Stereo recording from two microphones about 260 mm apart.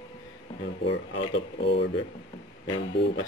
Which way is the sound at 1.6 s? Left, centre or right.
Left.